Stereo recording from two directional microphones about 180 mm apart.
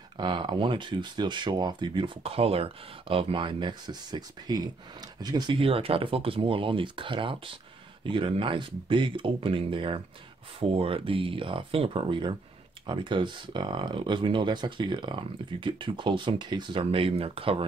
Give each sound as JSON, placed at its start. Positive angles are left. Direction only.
{"t": 0.2, "sound": "speech", "side_deg": -25}